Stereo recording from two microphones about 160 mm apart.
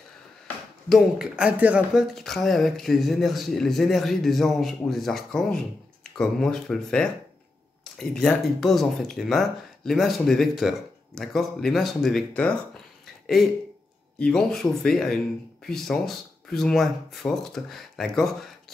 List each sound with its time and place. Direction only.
0.8 s speech: centre (ahead or behind)
14.1 s speech: 5° left (ahead or behind)